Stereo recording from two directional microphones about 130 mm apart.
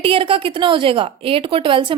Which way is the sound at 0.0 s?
45° right (ahead or behind).